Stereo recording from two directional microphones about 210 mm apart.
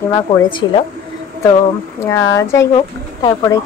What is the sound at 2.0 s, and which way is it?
A woman's voice, 15° left (ahead or behind).